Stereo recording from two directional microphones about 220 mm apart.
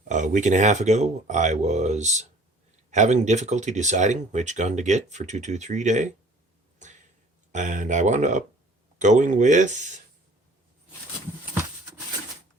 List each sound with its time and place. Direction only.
0.1 s speech: 35° right (ahead or behind)
7.5 s speech: 35° right (ahead or behind)